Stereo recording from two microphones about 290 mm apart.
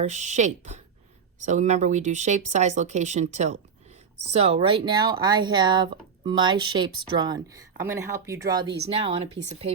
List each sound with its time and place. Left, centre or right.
0.0 s speech: right